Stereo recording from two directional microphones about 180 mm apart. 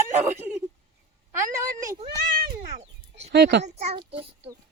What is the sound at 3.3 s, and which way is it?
Speech, 70° right (ahead or behind).